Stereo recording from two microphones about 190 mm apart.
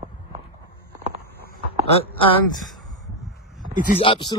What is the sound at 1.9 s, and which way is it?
Speech, 30° left (ahead or behind).